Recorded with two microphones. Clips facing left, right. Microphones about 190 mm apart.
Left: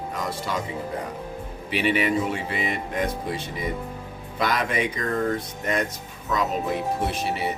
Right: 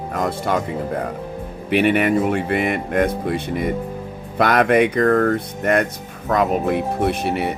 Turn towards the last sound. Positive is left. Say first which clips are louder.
# right 6 dB
turn(degrees=-60)  # may be behind; listen again after turning